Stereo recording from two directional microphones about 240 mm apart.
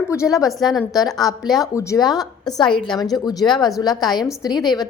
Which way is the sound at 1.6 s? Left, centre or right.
Centre.